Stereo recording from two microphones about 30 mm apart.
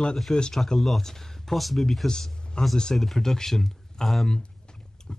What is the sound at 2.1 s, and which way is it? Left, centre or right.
Speech, left.